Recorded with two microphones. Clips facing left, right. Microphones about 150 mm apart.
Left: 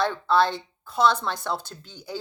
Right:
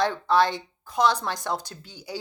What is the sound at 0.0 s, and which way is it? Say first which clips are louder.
Speech: even; 15° right (ahead or behind).